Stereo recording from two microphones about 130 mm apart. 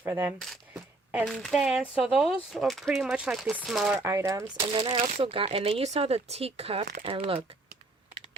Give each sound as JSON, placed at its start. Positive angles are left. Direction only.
{"t": 0.0, "sound": "speech", "side_deg": -15}
{"t": 0.3, "sound": "speech", "side_deg": 0}
{"t": 4.0, "sound": "speech", "side_deg": -25}
{"t": 4.6, "sound": "speech", "side_deg": -45}